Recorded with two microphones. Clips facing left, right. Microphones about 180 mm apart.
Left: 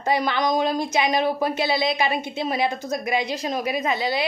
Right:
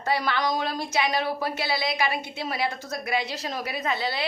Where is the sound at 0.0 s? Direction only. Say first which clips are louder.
Left 4 dB; 20° left (ahead or behind).